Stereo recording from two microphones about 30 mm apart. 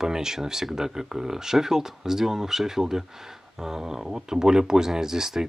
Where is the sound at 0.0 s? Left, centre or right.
Centre.